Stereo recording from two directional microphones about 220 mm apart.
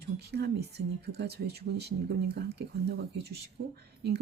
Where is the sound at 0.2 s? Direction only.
50° right (ahead or behind).